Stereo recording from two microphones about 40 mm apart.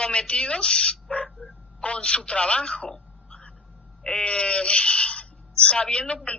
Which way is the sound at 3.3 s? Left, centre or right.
Centre.